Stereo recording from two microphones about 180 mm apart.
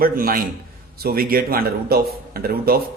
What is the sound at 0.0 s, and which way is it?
A man's voice, 55° right (ahead or behind).